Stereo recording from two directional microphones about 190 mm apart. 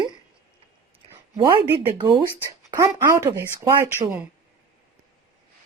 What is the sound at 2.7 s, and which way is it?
Speech, 15° right (ahead or behind).